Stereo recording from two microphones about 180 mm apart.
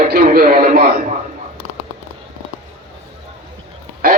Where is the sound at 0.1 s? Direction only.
55° right (ahead or behind).